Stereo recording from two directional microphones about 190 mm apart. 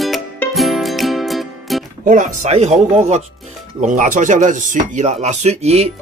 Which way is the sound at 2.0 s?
40° right (ahead or behind).